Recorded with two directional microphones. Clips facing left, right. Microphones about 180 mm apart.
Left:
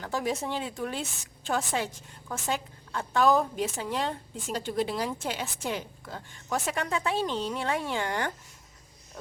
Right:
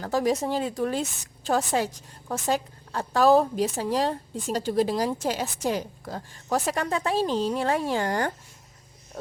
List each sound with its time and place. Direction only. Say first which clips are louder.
0.0 s a woman's voice: right 6 dB; 40° right (ahead or behind)